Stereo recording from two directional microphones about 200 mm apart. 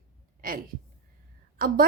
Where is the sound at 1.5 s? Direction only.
45° right (ahead or behind).